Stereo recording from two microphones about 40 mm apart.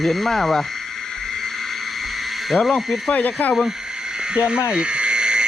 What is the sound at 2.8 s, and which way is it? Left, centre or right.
Speech, centre.